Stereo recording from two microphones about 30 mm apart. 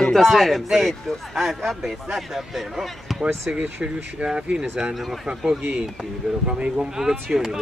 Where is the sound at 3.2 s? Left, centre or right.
Right.